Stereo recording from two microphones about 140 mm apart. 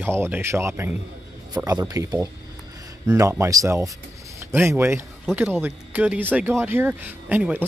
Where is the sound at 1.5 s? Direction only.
30° right (ahead or behind).